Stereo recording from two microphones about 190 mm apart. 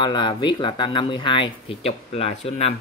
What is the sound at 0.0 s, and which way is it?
Speech, 25° left (ahead or behind).